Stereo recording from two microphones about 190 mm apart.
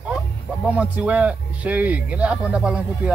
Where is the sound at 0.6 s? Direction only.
5° right (ahead or behind).